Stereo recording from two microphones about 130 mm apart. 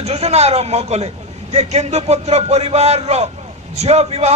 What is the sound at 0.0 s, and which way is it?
A man's voice, 55° right (ahead or behind).